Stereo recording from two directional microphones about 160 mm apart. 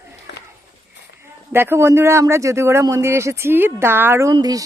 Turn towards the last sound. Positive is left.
turn(degrees=-25)  # may be behind; listen again after turning